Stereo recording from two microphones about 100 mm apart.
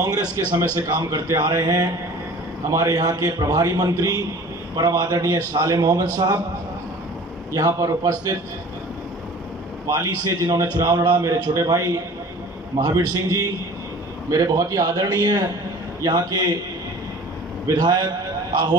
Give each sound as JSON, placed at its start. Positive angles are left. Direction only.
{"t": 0.0, "sound": "a man's voice", "side_deg": -40}
{"t": 7.5, "sound": "a man's voice", "side_deg": -35}
{"t": 9.8, "sound": "a man's voice", "side_deg": -35}
{"t": 17.6, "sound": "a man's voice", "side_deg": -40}